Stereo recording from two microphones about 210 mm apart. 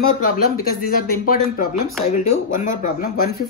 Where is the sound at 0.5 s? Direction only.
45° left (ahead or behind).